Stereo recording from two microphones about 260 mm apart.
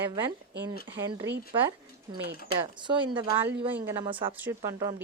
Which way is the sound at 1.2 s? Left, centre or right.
Right.